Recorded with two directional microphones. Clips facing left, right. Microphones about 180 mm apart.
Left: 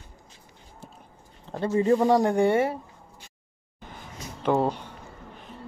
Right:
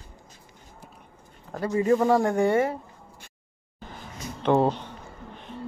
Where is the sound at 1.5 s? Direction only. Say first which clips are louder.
Even; 25° left (ahead or behind).